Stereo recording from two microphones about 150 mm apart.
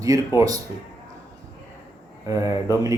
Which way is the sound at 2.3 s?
20° right (ahead or behind).